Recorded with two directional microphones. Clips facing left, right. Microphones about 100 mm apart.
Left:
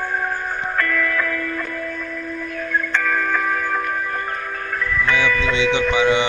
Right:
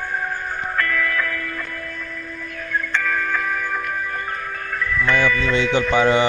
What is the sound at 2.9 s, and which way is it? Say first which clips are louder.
Music: left 1 dB; 45° left (ahead or behind).